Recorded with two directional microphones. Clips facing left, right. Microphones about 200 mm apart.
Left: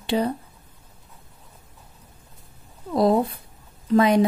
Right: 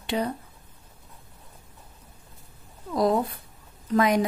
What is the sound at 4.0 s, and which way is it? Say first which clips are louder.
Speech: left 4 dB; 30° left (ahead or behind).